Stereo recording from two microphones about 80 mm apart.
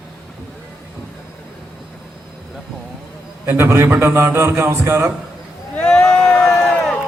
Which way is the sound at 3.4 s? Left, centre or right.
Right.